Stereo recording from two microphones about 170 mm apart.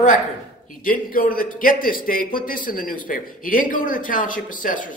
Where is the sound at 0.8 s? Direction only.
55° left (ahead or behind).